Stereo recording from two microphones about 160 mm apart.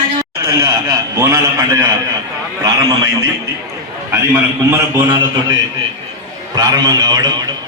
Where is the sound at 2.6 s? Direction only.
20° right (ahead or behind).